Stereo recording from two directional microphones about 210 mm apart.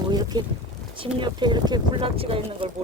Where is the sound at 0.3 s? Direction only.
20° right (ahead or behind).